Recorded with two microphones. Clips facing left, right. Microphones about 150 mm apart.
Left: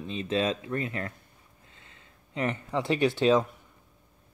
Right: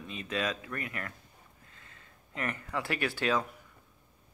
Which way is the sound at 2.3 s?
20° left (ahead or behind).